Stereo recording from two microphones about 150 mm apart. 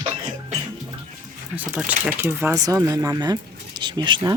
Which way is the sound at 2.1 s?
10° right (ahead or behind).